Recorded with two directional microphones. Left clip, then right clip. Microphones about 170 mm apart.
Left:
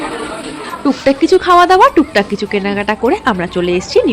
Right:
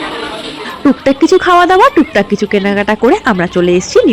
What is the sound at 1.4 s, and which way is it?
Speech, 25° right (ahead or behind).